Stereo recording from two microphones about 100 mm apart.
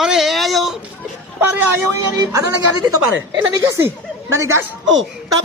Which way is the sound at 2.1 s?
40° right (ahead or behind).